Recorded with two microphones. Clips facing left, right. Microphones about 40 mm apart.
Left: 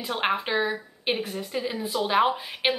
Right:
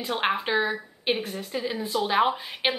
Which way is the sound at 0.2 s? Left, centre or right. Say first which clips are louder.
Even; centre.